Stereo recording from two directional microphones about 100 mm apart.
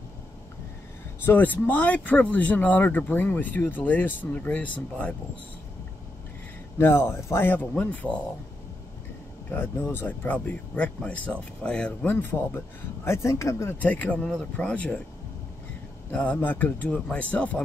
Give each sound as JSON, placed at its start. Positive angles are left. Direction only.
{"t": 1.2, "sound": "speech", "side_deg": 20}
{"t": 6.8, "sound": "speech", "side_deg": 25}
{"t": 9.5, "sound": "speech", "side_deg": 20}
{"t": 12.1, "sound": "speech", "side_deg": 20}
{"t": 16.1, "sound": "speech", "side_deg": 15}